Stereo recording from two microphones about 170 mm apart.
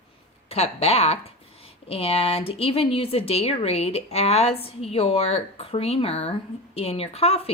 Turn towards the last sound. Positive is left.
turn(degrees=35)  # may be behind; listen again after turning